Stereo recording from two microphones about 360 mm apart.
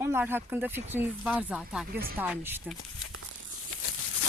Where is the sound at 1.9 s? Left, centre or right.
Right.